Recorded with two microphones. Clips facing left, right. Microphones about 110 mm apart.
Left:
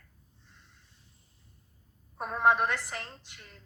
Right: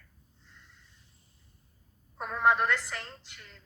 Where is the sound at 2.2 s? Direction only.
15° left (ahead or behind).